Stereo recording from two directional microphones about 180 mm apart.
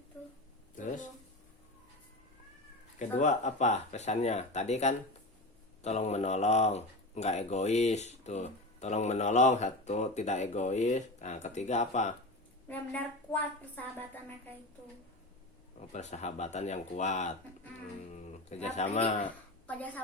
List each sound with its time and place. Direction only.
3.0 s speech: 45° left (ahead or behind)
12.6 s a woman's voice: 10° left (ahead or behind)
15.9 s speech: 40° left (ahead or behind)
19.6 s a woman's voice: 10° left (ahead or behind)